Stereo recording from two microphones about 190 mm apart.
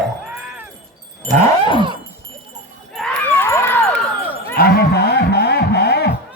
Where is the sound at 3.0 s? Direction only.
10° left (ahead or behind).